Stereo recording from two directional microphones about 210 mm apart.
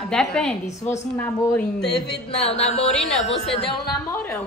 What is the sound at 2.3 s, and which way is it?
Speech, 30° left (ahead or behind).